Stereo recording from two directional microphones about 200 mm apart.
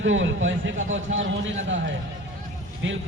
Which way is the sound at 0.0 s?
70° right (ahead or behind).